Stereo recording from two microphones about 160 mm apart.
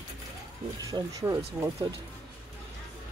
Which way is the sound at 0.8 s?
25° right (ahead or behind).